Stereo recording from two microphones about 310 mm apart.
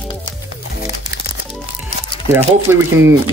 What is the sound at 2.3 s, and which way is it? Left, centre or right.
Speech, centre.